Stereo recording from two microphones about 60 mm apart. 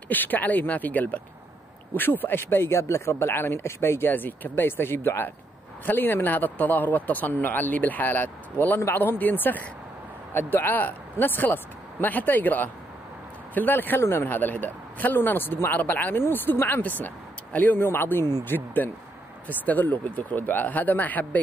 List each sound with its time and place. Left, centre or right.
0.1 s speech: left